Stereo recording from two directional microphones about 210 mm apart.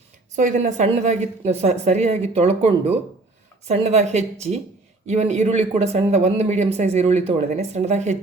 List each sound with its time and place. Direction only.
0.3 s speech: 35° right (ahead or behind)